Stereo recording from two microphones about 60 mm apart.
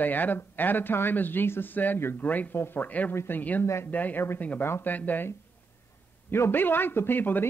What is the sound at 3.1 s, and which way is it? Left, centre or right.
Speech, left.